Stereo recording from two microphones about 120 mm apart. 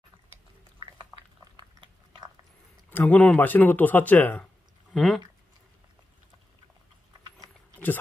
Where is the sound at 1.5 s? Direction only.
35° right (ahead or behind).